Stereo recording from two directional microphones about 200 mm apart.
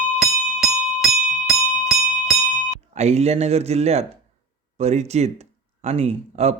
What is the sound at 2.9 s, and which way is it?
Speech, 35° right (ahead or behind).